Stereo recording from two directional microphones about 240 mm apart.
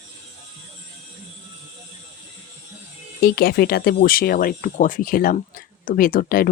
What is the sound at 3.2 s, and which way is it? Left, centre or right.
Speech, left.